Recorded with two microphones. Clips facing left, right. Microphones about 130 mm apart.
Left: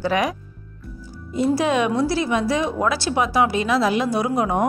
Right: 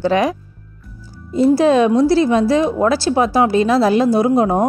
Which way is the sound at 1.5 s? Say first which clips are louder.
Right 7 dB; 30° right (ahead or behind).